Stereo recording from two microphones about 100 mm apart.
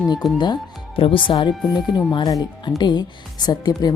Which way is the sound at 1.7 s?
45° left (ahead or behind).